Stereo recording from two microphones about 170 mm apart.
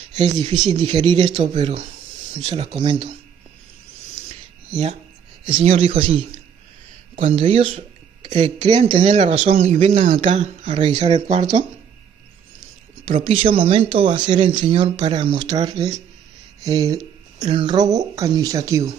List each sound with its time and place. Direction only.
0.7 s speech: 25° right (ahead or behind)
1.5 s speech: 40° right (ahead or behind)
5.4 s speech: 35° right (ahead or behind)
8.9 s speech: 45° right (ahead or behind)
10.7 s speech: 30° right (ahead or behind)
11.1 s speech: 40° right (ahead or behind)
13.2 s speech: 35° right (ahead or behind)